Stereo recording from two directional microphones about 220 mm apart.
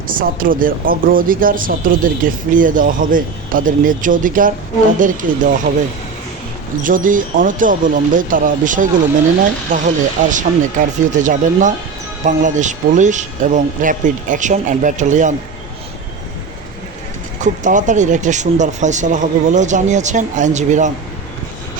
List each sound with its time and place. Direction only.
0.1 s speech: 40° right (ahead or behind)
6.8 s speech: 40° right (ahead or behind)
17.4 s speech: 35° right (ahead or behind)